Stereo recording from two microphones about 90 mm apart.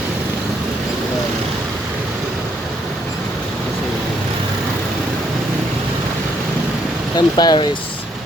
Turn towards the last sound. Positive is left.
turn(degrees=50)  # may be behind; listen again after turning